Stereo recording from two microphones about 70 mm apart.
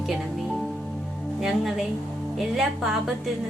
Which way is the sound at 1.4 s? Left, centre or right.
Centre.